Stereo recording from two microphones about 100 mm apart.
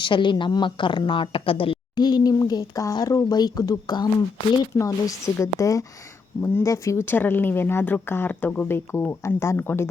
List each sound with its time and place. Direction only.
0.0 s a woman's voice: 55° left (ahead or behind)
2.0 s speech: 45° left (ahead or behind); by 9.9 s 25° left (ahead or behind)